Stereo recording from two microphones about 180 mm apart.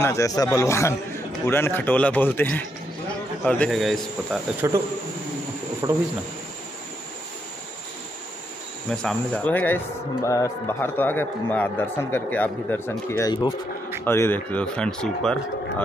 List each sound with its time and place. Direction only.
0.0 s a man's voice: 15° left (ahead or behind); by 4.4 s centre (ahead or behind)
4.6 s speech: 15° right (ahead or behind)
8.9 s speech: 5° left (ahead or behind)